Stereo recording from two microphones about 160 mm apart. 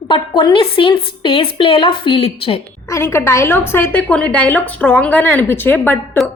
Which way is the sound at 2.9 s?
15° left (ahead or behind).